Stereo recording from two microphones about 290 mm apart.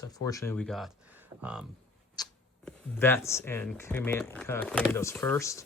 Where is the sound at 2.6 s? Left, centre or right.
Centre.